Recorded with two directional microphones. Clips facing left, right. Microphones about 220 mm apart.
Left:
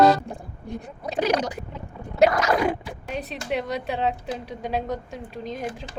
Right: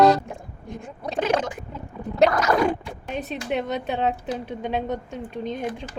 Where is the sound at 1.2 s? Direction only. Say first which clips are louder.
Even; 40° left (ahead or behind).